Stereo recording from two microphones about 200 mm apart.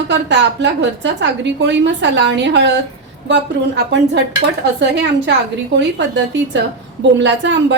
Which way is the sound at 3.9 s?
60° right (ahead or behind).